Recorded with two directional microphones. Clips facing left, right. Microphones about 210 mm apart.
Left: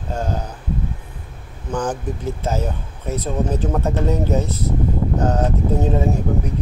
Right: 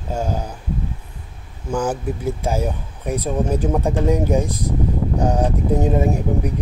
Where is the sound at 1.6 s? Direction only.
10° right (ahead or behind).